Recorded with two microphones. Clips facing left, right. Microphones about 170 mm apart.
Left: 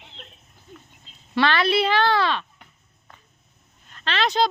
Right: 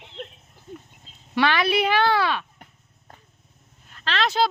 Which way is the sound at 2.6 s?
40° right (ahead or behind).